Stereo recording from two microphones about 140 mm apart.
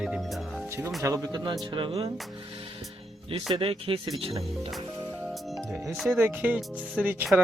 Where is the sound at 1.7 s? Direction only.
40° right (ahead or behind).